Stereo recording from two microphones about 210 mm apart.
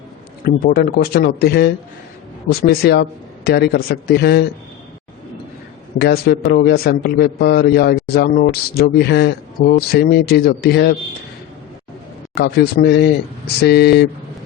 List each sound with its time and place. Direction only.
0.4 s a man's voice: 45° left (ahead or behind)
6.0 s a man's voice: 50° left (ahead or behind)
12.4 s a man's voice: 50° left (ahead or behind)